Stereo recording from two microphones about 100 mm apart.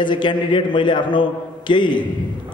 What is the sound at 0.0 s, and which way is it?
A man's voice, 50° left (ahead or behind).